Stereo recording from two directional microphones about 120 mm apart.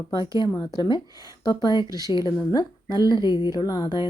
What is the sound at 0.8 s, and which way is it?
Speech, 40° left (ahead or behind).